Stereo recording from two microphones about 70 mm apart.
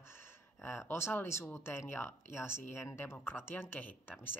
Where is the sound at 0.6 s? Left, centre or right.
Left.